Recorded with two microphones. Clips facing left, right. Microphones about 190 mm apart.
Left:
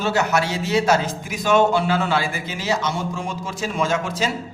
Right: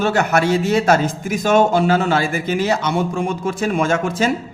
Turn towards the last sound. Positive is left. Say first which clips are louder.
# right 4 dB
turn(degrees=-55)  # may be behind; listen again after turning